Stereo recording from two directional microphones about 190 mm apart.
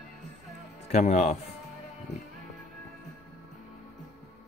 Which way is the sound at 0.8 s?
35° left (ahead or behind).